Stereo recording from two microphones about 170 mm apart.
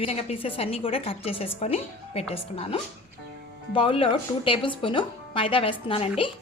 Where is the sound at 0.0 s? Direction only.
35° left (ahead or behind).